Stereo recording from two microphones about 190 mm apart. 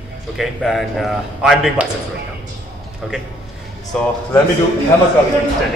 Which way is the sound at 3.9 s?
5° left (ahead or behind).